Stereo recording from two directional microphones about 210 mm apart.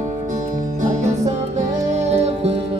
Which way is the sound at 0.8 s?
35° right (ahead or behind).